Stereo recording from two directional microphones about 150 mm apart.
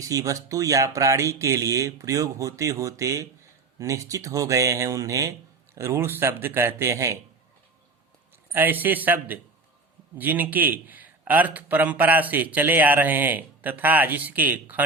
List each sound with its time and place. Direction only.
0.0 s a man's voice: 25° right (ahead or behind)
8.5 s a man's voice: 10° right (ahead or behind)